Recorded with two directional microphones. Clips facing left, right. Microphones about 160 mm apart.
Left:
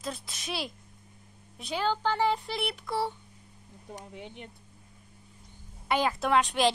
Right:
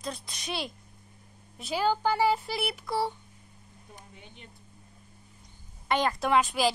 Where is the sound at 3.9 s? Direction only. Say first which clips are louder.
Left 9 dB; 80° left.